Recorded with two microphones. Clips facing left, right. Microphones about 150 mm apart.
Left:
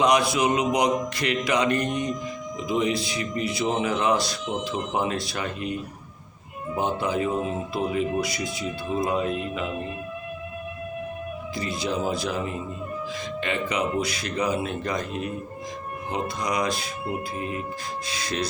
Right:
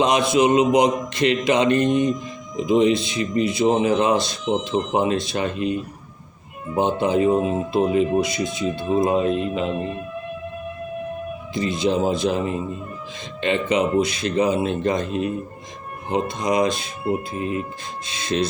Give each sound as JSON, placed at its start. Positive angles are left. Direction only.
{"t": 0.0, "sound": "speech", "side_deg": -25}
{"t": 11.5, "sound": "speech", "side_deg": -20}
{"t": 18.1, "sound": "speech", "side_deg": -25}